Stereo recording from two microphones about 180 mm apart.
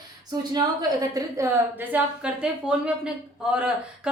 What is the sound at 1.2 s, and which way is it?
A woman's voice, 15° right (ahead or behind).